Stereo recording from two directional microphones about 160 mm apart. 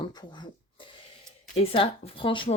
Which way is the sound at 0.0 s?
30° left (ahead or behind).